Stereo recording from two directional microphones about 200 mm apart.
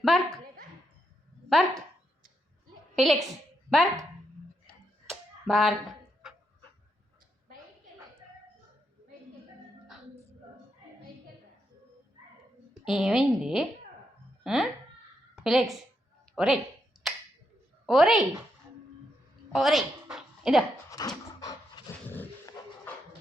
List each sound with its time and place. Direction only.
0.0 s a woman's voice: centre (ahead or behind)
1.5 s speech: centre (ahead or behind)
3.0 s a woman's voice: centre (ahead or behind)
5.0 s finger snapping: centre (ahead or behind)
12.8 s a woman's voice: centre (ahead or behind)
16.9 s finger snapping: centre (ahead or behind)
17.8 s a woman's voice: centre (ahead or behind)
19.5 s a sound: centre (ahead or behind)
21.0 s a sound: 20° left (ahead or behind)
22.1 s dog: 10° left (ahead or behind)